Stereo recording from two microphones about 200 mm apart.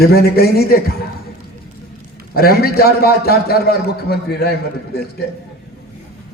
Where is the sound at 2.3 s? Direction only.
50° left (ahead or behind).